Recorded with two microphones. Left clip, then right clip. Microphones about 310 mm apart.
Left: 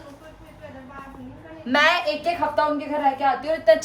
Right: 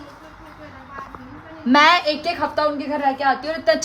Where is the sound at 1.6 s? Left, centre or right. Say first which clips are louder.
Right 5 dB; centre.